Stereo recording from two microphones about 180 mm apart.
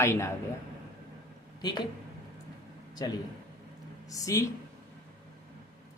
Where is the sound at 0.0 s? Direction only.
15° left (ahead or behind).